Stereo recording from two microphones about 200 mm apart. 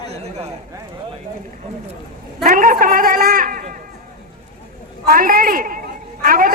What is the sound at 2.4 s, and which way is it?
Speech, 45° right (ahead or behind).